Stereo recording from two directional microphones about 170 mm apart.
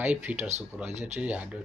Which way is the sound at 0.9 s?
40° right (ahead or behind).